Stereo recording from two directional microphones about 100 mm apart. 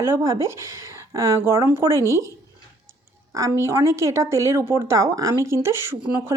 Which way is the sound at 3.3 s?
30° right (ahead or behind).